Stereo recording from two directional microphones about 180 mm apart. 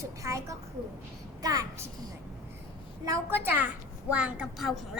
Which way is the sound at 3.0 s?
15° right (ahead or behind).